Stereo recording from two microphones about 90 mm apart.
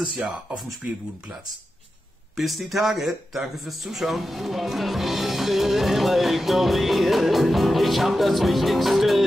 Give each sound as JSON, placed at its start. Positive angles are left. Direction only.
{"t": 0.0, "sound": "speech", "side_deg": -15}
{"t": 2.3, "sound": "speech", "side_deg": 0}